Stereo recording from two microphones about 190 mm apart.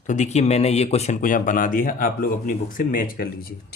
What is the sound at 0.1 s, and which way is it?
Speech, 40° left (ahead or behind).